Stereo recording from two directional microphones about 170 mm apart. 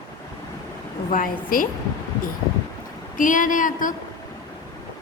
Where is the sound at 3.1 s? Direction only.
50° left (ahead or behind).